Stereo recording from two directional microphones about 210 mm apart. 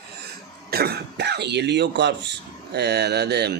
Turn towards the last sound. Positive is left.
turn(degrees=-50)  # may be behind; listen again after turning